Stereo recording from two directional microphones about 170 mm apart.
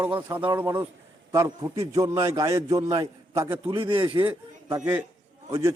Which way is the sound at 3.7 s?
30° right (ahead or behind).